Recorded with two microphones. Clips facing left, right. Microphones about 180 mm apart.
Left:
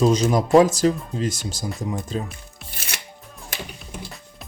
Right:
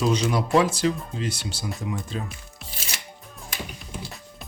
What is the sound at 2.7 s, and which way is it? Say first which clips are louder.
Chopping: left 1 dB; 60° left (ahead or behind).